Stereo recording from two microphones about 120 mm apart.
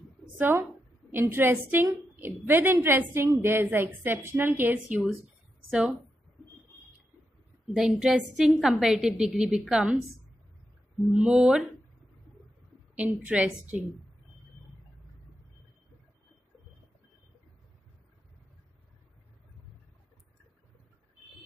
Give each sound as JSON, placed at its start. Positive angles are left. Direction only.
{"t": 0.4, "sound": "a woman's voice", "side_deg": -15}
{"t": 5.7, "sound": "a woman's voice", "side_deg": -5}
{"t": 7.7, "sound": "a woman's voice", "side_deg": -5}
{"t": 11.1, "sound": "a woman's voice", "side_deg": -5}
{"t": 12.9, "sound": "a woman's voice", "side_deg": -10}